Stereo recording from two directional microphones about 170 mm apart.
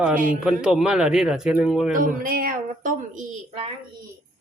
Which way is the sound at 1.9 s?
55° right (ahead or behind).